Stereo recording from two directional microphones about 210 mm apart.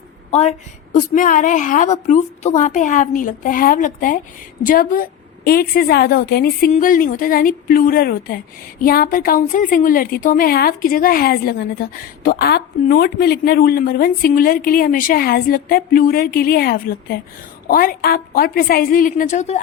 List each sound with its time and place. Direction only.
0.3 s a woman's voice: 30° left (ahead or behind)